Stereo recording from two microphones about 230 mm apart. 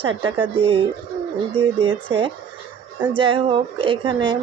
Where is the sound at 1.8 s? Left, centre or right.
Right.